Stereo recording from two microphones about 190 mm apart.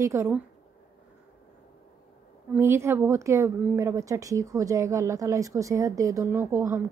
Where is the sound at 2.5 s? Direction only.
10° right (ahead or behind).